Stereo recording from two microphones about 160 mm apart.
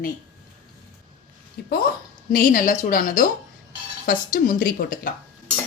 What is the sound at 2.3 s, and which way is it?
Speech, 60° left (ahead or behind).